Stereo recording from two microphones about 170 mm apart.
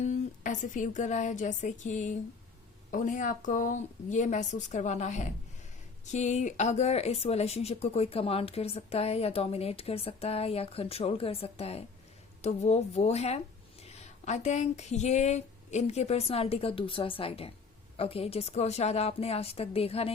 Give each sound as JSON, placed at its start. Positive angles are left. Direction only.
{"t": 0.0, "sound": "speech", "side_deg": 45}